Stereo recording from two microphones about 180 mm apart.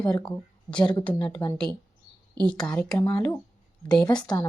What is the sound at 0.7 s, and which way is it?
Speech, 25° left (ahead or behind).